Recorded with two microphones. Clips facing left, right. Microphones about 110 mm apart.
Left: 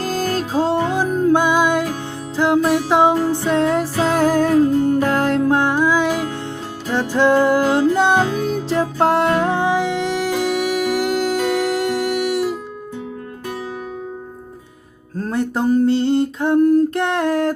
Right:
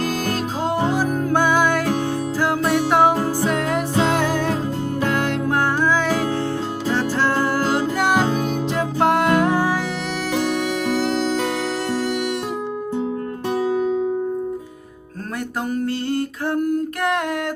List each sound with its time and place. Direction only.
0.0 s music: 35° left (ahead or behind)
0.9 s music: 25° left (ahead or behind)
4.1 s music: 40° left (ahead or behind)
5.5 s music: 15° left (ahead or behind)
15.4 s a sound: 30° left (ahead or behind)